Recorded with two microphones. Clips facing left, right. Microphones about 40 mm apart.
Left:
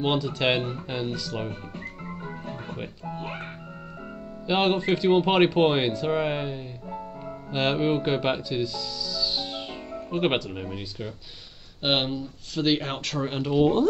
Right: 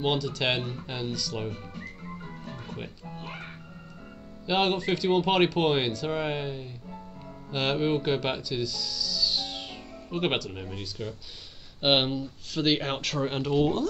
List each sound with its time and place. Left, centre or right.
0.0 s speech: centre
3.1 s music: left
4.5 s speech: centre
11.8 s speech: centre